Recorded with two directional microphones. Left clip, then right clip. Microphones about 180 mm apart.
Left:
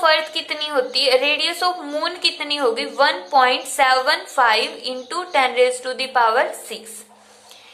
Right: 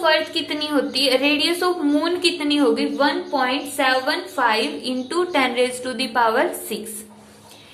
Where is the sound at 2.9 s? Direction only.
35° left (ahead or behind); by 6.8 s 15° left (ahead or behind).